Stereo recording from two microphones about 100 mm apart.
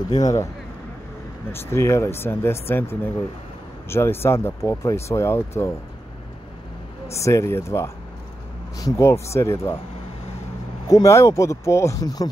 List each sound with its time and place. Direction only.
0.2 s speech: 35° left (ahead or behind)
1.5 s speech: 25° left (ahead or behind)
7.1 s speech: 30° left (ahead or behind)
10.9 s speech: 30° left (ahead or behind)